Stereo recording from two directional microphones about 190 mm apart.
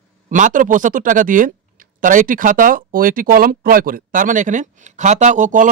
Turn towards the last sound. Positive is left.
turn(degrees=-40)  # may be behind; listen again after turning